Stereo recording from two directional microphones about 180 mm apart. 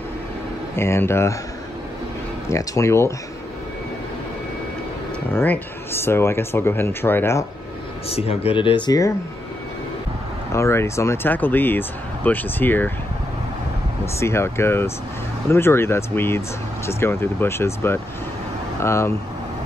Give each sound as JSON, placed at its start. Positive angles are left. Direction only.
{"t": 0.7, "sound": "speech", "side_deg": 15}
{"t": 2.5, "sound": "speech", "side_deg": 15}
{"t": 5.3, "sound": "speech", "side_deg": 10}
{"t": 8.1, "sound": "speech", "side_deg": 35}
{"t": 10.5, "sound": "speech", "side_deg": 15}
{"t": 14.2, "sound": "speech", "side_deg": 15}